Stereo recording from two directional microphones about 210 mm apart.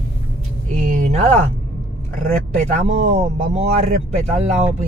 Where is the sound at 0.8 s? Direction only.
35° right (ahead or behind).